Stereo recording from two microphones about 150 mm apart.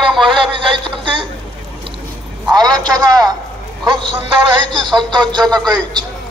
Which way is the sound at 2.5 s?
30° right (ahead or behind).